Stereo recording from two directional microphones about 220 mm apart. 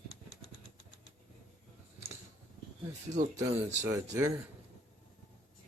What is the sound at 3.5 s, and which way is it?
Speech, 15° right (ahead or behind).